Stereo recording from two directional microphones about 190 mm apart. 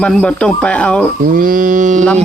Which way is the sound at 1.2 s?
45° right (ahead or behind).